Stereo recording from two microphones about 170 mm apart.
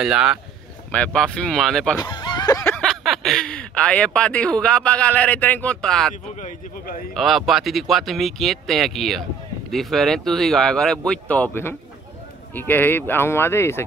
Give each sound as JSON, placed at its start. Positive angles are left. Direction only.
{"t": 0.0, "sound": "speech", "side_deg": -5}
{"t": 2.0, "sound": "a sound", "side_deg": 25}
{"t": 2.6, "sound": "speech", "side_deg": 5}
{"t": 6.4, "sound": "speech", "side_deg": 55}
{"t": 7.2, "sound": "speech", "side_deg": 0}